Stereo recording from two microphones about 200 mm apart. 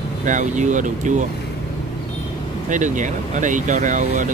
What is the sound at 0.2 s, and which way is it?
Speech, 40° right (ahead or behind).